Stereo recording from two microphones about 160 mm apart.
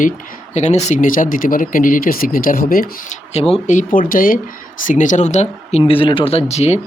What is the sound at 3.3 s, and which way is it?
Speech, 40° left (ahead or behind).